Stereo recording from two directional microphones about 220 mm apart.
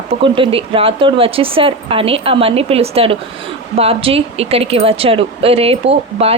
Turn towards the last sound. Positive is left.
turn(degrees=-25)  # may be behind; listen again after turning